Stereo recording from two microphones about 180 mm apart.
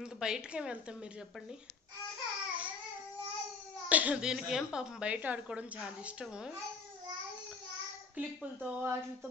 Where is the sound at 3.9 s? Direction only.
5° right (ahead or behind).